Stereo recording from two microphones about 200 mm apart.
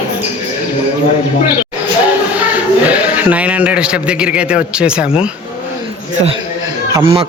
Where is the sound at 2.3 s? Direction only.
5° right (ahead or behind).